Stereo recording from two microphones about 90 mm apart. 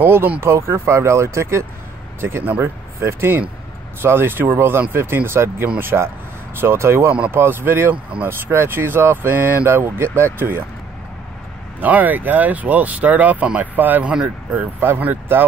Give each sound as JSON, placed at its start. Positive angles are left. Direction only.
{"t": 0.0, "sound": "speech", "side_deg": -25}
{"t": 11.8, "sound": "speech", "side_deg": -20}